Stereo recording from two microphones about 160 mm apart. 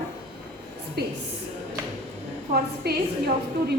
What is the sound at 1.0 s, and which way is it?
Speech, 80° right.